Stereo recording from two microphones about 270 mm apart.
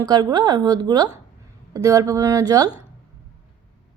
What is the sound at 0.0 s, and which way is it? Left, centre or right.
Speech, centre.